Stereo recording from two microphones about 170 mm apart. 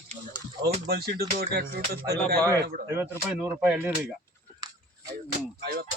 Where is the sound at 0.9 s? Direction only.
65° right (ahead or behind).